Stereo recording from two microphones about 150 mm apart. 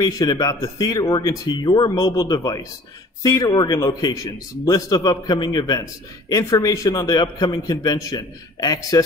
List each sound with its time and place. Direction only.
0.0 s a man's voice: 25° left (ahead or behind)